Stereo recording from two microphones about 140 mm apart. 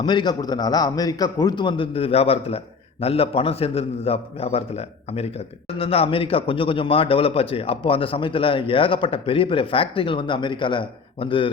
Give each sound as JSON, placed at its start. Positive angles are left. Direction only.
{"t": 0.0, "sound": "a man's voice", "side_deg": 30}